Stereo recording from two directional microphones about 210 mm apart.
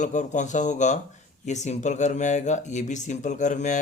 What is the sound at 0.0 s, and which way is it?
Speech, 35° left (ahead or behind).